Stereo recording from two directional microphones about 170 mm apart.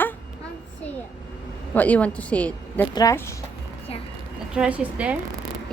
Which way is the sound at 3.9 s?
35° left (ahead or behind).